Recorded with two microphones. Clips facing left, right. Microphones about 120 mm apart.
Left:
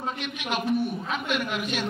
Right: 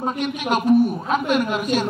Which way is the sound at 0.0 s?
40° right (ahead or behind).